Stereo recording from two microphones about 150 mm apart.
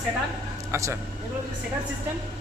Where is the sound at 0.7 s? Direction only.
20° right (ahead or behind).